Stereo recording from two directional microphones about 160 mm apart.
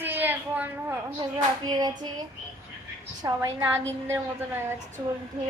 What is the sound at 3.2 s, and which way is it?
A woman's voice, 20° right (ahead or behind).